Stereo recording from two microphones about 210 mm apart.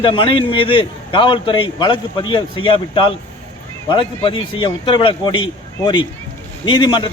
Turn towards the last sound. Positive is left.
turn(degrees=20)  # may be behind; listen again after turning